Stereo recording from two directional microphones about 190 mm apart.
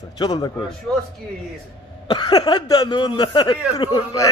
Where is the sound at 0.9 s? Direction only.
5° left (ahead or behind).